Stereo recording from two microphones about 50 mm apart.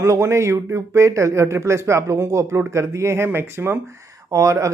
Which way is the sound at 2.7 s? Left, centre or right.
Right.